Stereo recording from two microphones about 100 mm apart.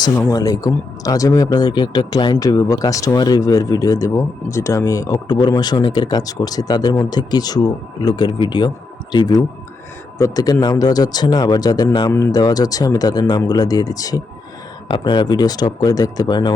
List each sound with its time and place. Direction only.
0.3 s speech: 35° left (ahead or behind)
14.8 s speech: 50° left (ahead or behind)